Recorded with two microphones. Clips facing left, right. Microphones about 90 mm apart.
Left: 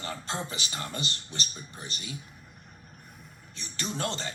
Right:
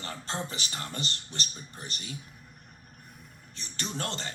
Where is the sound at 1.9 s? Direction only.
50° right (ahead or behind).